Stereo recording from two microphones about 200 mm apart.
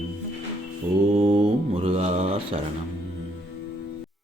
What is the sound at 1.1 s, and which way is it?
Mantra, 30° right (ahead or behind).